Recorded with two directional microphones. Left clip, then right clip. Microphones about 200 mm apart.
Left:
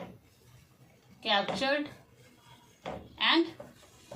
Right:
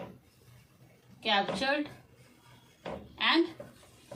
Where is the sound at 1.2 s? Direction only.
20° right (ahead or behind).